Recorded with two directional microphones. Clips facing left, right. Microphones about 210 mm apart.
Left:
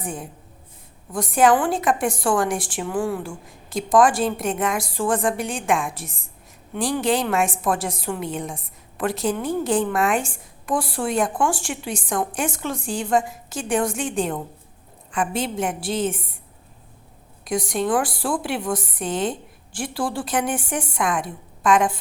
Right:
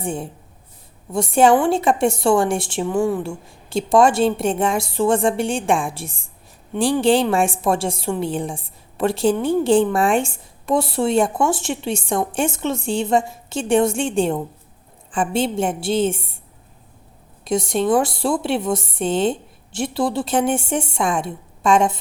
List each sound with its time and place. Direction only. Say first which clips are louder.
0.0 s a woman's voice: right 5 dB; 30° right (ahead or behind)
17.4 s a woman's voice: right 4 dB; 25° right (ahead or behind)